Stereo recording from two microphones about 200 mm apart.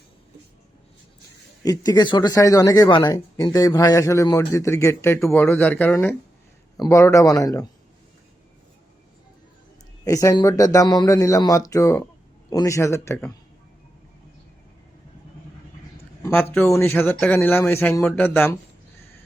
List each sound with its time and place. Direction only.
1.6 s speech: 20° left (ahead or behind)
10.0 s speech: 15° left (ahead or behind)
16.2 s speech: 10° left (ahead or behind)